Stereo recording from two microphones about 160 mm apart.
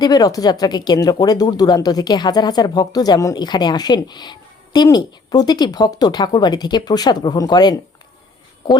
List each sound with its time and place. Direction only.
0.0 s speech: 25° left (ahead or behind)